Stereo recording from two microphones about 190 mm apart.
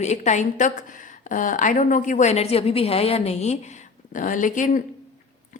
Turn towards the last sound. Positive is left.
turn(degrees=40)  # may be behind; listen again after turning